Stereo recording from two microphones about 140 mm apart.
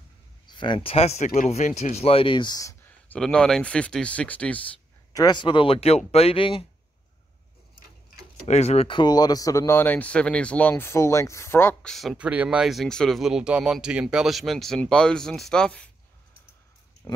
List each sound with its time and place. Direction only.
0.5 s speech: 35° left (ahead or behind)
2.8 s speech: 10° left (ahead or behind)
5.1 s speech: 30° left (ahead or behind)
8.5 s speech: 50° left (ahead or behind); by 11.7 s 20° left (ahead or behind)
11.8 s speech: centre (ahead or behind)
17.0 s speech: 20° left (ahead or behind)